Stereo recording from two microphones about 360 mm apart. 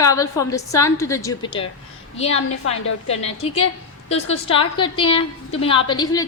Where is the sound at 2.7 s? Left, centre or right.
Centre.